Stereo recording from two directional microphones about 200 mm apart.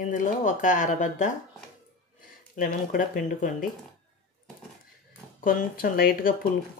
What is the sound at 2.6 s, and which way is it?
Speech, 45° left (ahead or behind).